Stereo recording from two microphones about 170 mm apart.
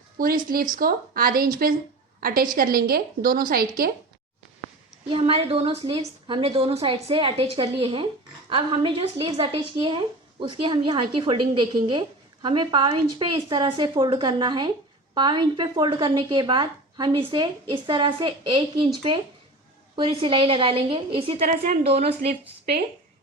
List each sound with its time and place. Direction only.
0.2 s a woman's voice: 60° right (ahead or behind)
5.0 s a woman's voice: 30° right (ahead or behind)
20.0 s a woman's voice: 30° right (ahead or behind)
21.4 s a woman's voice: 55° right (ahead or behind)
21.8 s a woman's voice: 40° right (ahead or behind)